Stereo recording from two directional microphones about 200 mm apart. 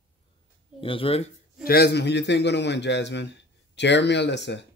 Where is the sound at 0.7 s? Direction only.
25° left (ahead or behind).